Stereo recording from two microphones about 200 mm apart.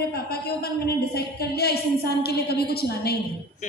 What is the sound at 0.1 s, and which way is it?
A woman's voice, 50° left (ahead or behind).